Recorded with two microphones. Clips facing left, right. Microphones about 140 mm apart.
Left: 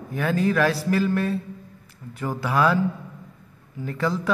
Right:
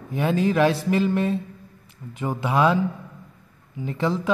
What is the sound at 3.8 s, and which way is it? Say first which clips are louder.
Speech: right 1 dB; 25° right (ahead or behind).